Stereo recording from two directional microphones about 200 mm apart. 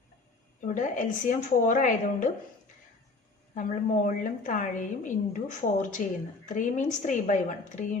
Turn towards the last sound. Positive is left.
turn(degrees=40)  # may be behind; listen again after turning